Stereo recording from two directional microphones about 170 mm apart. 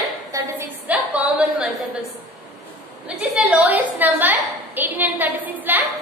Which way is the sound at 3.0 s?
5° right (ahead or behind).